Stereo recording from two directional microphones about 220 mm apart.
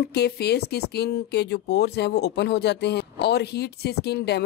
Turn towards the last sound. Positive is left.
turn(degrees=50)  # may be behind; listen again after turning